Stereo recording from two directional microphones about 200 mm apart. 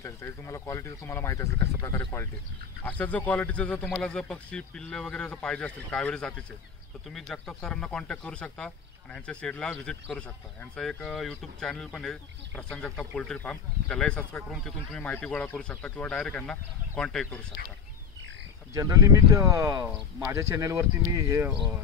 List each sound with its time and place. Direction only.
0.0 s speech: 15° left (ahead or behind)
18.7 s speech: 15° right (ahead or behind)